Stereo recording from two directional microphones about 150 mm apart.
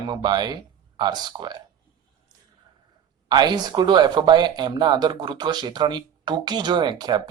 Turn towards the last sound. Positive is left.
turn(degrees=-30)  # may be behind; listen again after turning